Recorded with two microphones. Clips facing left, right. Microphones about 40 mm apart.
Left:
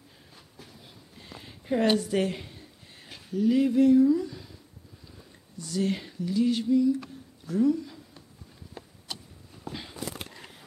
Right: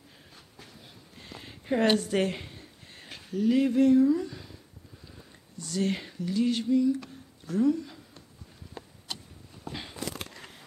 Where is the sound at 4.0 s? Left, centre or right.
Centre.